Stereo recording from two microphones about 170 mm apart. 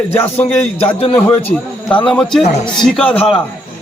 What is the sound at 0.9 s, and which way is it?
Speech, 35° left (ahead or behind).